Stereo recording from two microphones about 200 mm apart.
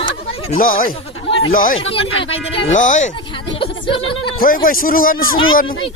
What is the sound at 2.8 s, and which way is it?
Speech, 40° left (ahead or behind).